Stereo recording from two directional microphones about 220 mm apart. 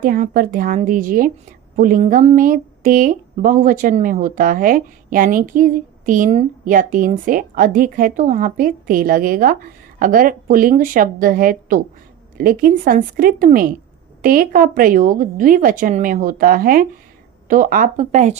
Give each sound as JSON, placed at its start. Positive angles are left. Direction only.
{"t": 0.0, "sound": "a woman's voice", "side_deg": -40}